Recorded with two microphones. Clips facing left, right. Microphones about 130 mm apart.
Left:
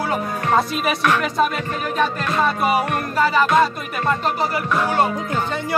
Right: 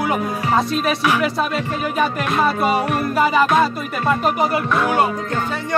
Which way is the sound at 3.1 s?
15° right (ahead or behind).